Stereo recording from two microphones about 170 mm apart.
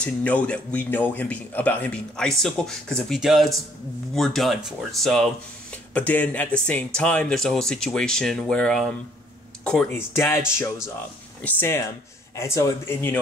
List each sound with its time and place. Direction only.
0.0 s speech: 10° left (ahead or behind)
11.4 s speech: 10° left (ahead or behind)